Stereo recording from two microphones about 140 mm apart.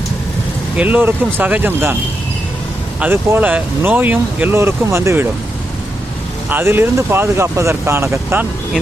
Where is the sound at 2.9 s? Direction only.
15° right (ahead or behind).